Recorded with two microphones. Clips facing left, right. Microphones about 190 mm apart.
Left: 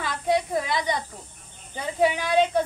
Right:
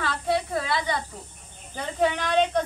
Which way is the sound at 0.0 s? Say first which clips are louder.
Left 2 dB; 15° left (ahead or behind).